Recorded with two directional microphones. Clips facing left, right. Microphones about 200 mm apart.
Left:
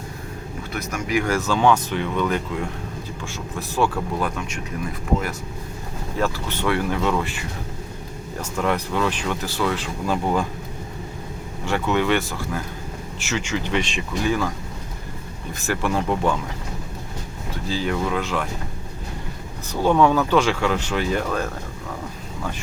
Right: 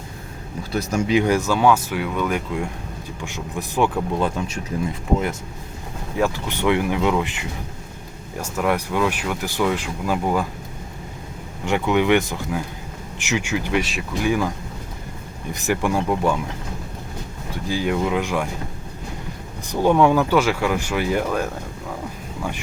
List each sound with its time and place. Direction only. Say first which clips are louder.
0.7 s speech: right 5 dB; 30° right (ahead or behind)
6.1 s speech: right 2 dB; 15° right (ahead or behind)
11.6 s speech: right 2 dB; 15° right (ahead or behind)
15.5 s speech: right 2 dB; 15° right (ahead or behind)
17.7 s speech: right 2 dB; 15° right (ahead or behind)
19.7 s speech: right 1 dB; 15° right (ahead or behind)